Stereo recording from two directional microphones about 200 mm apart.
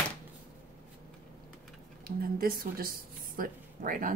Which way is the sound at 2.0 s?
45° right (ahead or behind).